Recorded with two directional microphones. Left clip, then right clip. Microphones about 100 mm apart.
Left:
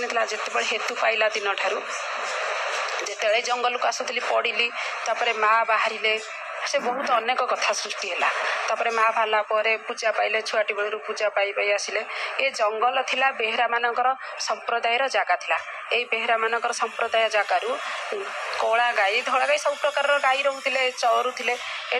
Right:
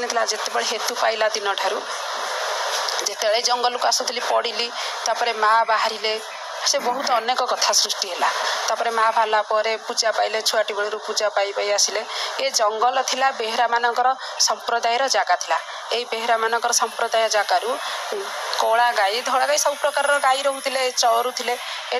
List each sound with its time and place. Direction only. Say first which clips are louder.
0.1 s a woman's voice: right 3 dB; 40° right (ahead or behind)
3.3 s a woman's voice: right 2 dB; 50° right (ahead or behind)
7.2 s speech: right 2 dB; 45° right (ahead or behind)
12.9 s a woman's voice: right 2 dB; 55° right (ahead or behind)